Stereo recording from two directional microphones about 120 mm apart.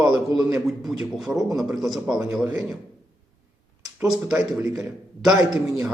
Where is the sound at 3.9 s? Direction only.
5° right (ahead or behind).